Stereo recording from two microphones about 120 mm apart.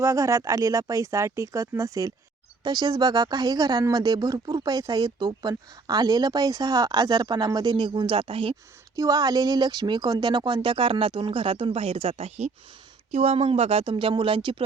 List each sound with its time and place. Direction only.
0.0 s speech: 25° right (ahead or behind); by 8.5 s 45° right (ahead or behind)
9.0 s speech: 30° right (ahead or behind); by 14.5 s 45° right (ahead or behind)